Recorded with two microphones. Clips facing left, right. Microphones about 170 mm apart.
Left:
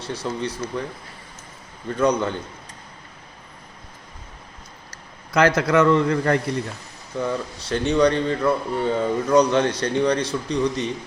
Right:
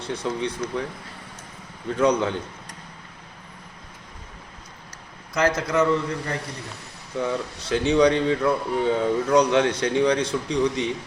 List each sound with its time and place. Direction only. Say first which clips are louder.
0.0 s a man's voice: even; centre (ahead or behind)
1.9 s a man's voice: even; centre (ahead or behind)
5.3 s a man's voice: left 5 dB; 70° left (ahead or behind)
7.2 s a man's voice: left 1 dB; centre (ahead or behind)